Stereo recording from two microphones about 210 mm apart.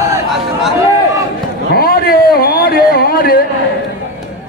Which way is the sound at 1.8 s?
45° left (ahead or behind).